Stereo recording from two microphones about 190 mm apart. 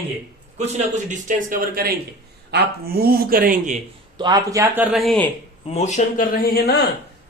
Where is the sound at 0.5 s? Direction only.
35° right (ahead or behind).